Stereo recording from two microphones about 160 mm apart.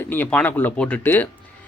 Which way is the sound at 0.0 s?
10° left (ahead or behind).